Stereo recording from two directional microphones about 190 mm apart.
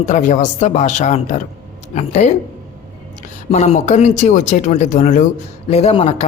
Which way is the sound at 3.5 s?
35° left (ahead or behind).